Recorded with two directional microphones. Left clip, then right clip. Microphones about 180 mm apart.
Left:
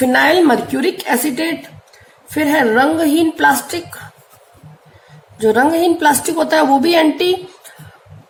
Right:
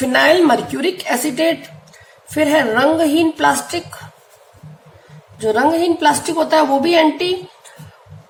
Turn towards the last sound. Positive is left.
turn(degrees=25)  # may be behind; listen again after turning